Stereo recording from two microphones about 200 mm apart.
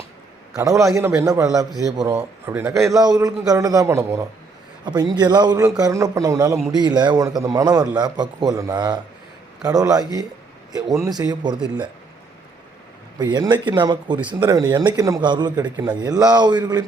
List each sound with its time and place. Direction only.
0.5 s a man's voice: 15° right (ahead or behind)
2.9 s a man's voice: 20° right (ahead or behind)
13.1 s a man's voice: 20° right (ahead or behind)
14.2 s a man's voice: 10° right (ahead or behind)